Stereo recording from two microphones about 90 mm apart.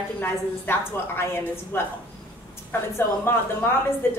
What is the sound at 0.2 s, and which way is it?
A woman's voice, 25° left (ahead or behind).